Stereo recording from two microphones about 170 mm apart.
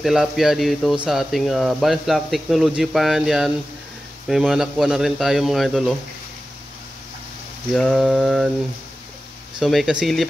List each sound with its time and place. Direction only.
0.0 s speech: centre (ahead or behind)
7.7 s speech: centre (ahead or behind)
9.6 s speech: centre (ahead or behind)